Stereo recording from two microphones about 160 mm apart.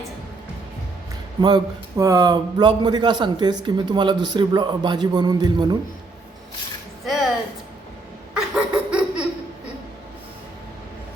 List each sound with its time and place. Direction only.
1.4 s a man's voice: 25° right (ahead or behind)
8.3 s laughter: 5° right (ahead or behind)